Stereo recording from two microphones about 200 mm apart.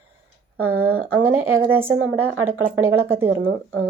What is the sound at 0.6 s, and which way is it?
Speech, 10° right (ahead or behind).